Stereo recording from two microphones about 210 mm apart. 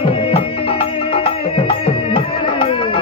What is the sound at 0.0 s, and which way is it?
Music, 25° left (ahead or behind).